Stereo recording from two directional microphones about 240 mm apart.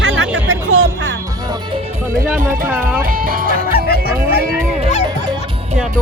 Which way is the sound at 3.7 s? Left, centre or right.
Left.